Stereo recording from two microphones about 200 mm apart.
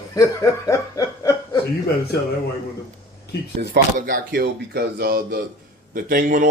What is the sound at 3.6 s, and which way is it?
Speech, 45° right (ahead or behind).